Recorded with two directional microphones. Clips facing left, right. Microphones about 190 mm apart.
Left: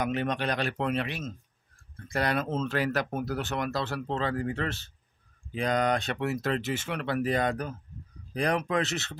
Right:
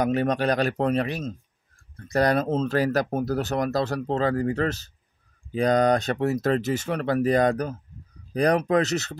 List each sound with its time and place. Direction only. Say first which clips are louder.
0.0 s speech: right 6 dB; 40° right (ahead or behind)